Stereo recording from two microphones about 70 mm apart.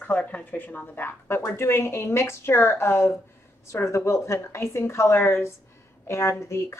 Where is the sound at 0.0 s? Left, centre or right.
Left.